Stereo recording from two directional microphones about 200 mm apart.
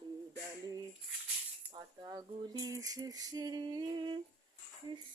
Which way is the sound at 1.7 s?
20° right (ahead or behind).